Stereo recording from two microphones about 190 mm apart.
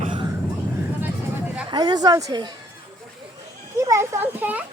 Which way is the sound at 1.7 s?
20° right (ahead or behind).